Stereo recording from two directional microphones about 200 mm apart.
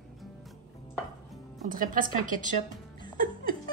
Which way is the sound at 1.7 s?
45° right (ahead or behind).